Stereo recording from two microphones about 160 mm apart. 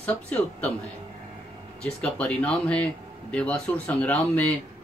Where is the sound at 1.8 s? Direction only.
5° left (ahead or behind).